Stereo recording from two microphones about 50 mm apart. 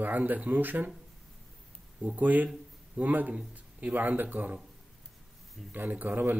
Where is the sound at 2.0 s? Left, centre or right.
Right.